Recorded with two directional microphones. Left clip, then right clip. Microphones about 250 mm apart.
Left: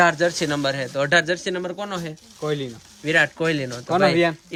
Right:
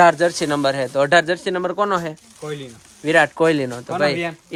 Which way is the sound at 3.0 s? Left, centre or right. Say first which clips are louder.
Right 4 dB; centre.